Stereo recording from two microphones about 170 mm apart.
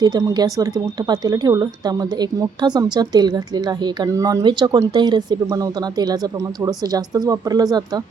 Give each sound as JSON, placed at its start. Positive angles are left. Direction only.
{"t": 0.0, "sound": "speech", "side_deg": -20}